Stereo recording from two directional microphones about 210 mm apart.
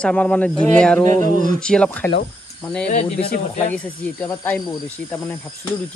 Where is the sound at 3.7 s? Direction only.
5° left (ahead or behind).